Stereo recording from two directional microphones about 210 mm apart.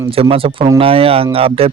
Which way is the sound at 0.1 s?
25° right (ahead or behind).